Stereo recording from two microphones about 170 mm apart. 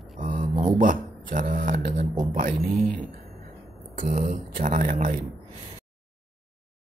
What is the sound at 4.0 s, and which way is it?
Speech, 50° right (ahead or behind).